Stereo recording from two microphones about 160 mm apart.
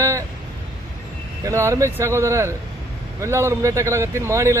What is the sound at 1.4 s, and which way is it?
Speech, 20° right (ahead or behind).